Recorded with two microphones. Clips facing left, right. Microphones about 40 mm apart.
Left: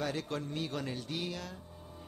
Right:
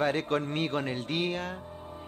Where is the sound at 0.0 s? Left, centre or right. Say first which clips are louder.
Right 8 dB; right.